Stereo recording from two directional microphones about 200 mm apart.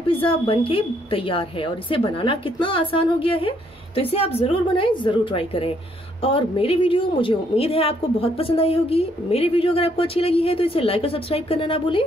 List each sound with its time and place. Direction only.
0.0 s a woman's voice: 25° left (ahead or behind)